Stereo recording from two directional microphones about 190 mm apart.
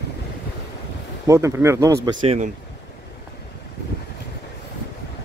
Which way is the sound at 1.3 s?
15° right (ahead or behind).